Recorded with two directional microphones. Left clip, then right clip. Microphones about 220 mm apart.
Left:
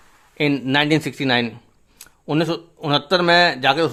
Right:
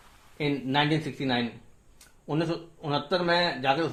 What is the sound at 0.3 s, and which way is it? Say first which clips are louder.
Speech: left 8 dB; 35° left (ahead or behind).